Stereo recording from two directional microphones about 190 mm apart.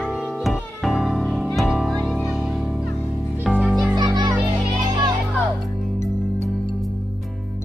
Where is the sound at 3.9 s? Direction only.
20° right (ahead or behind).